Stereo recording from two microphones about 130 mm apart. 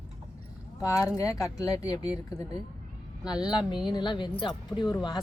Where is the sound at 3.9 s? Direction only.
35° left (ahead or behind).